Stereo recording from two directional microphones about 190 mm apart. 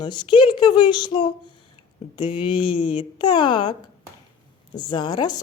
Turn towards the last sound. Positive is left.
turn(degrees=20)  # may be behind; listen again after turning